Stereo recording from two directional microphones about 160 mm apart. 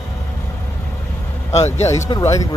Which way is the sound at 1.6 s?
45° left (ahead or behind).